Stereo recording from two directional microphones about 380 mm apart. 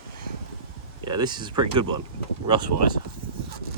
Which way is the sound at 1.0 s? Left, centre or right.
Centre.